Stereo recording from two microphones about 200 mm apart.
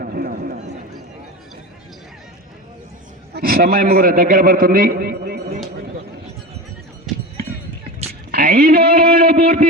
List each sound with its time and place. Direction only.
0.0 s run: 50° right (ahead or behind)
3.3 s a man's voice: 50° right (ahead or behind)
8.3 s a sound: 50° right (ahead or behind)